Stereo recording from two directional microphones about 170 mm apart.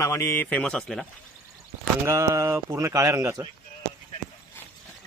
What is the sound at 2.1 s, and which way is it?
Speech, 15° right (ahead or behind).